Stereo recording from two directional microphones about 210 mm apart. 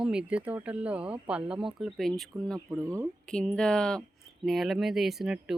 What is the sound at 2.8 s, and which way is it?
Speech, 15° right (ahead or behind).